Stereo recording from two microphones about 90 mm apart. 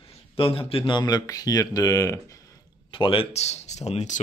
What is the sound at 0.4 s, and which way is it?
Speech, 90° left.